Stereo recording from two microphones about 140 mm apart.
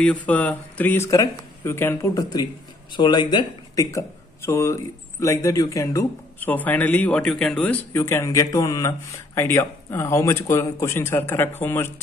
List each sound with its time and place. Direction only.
0.0 s speech: 10° left (ahead or behind)
7.9 s speech: 15° left (ahead or behind)